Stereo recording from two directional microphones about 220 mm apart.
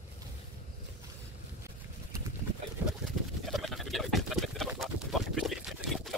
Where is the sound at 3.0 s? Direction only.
Centre (ahead or behind).